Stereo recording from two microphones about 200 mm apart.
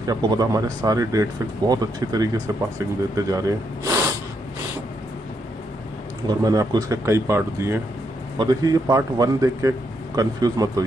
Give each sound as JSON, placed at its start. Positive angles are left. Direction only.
{"t": 0.0, "sound": "a man's voice", "side_deg": -20}
{"t": 6.2, "sound": "a man's voice", "side_deg": -20}